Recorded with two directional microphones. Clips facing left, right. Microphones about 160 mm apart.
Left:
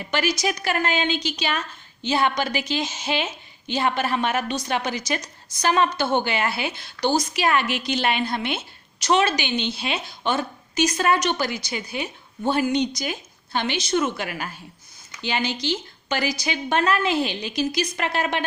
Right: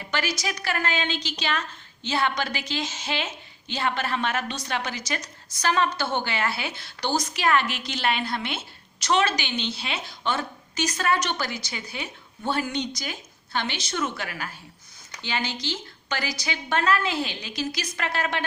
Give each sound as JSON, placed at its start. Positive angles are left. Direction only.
{"t": 0.1, "sound": "a woman's voice", "side_deg": 15}